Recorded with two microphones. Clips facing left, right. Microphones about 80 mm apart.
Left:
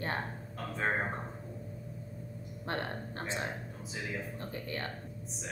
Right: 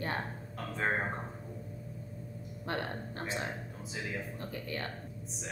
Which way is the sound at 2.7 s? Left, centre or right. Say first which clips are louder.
Even; left.